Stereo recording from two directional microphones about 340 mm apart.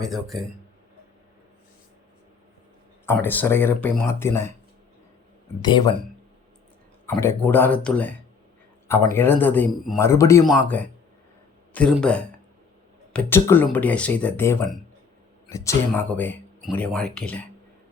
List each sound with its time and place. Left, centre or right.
0.0 s speech: centre
3.1 s speech: centre
5.6 s speech: centre
7.0 s speech: centre